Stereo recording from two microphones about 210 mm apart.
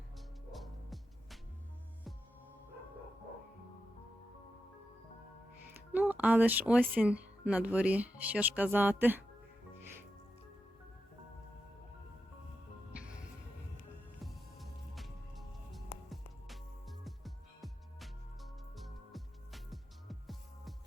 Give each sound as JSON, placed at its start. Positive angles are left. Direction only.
{"t": 0.5, "sound": "music", "side_deg": 0}
{"t": 5.9, "sound": "speech", "side_deg": -10}
{"t": 14.3, "sound": "music", "side_deg": 0}